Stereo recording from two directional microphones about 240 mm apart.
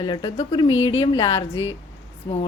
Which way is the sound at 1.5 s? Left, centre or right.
Left.